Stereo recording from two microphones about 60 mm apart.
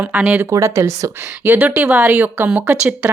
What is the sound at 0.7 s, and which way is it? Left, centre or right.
Speech, right.